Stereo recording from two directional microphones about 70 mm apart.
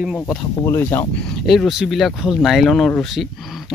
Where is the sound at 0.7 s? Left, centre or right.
Left.